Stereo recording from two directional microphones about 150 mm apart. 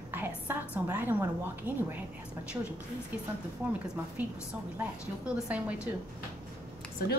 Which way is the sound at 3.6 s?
10° right (ahead or behind).